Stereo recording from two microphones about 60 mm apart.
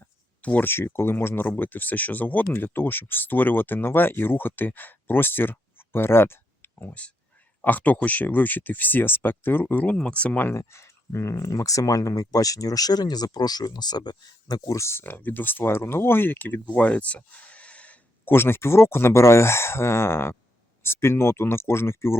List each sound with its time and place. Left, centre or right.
0.6 s speech: left
9.8 s speech: centre
10.4 s speech: left
14.8 s speech: left
18.3 s speech: left